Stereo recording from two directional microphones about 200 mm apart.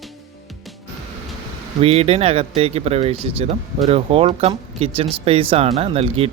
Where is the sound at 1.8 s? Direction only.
30° right (ahead or behind).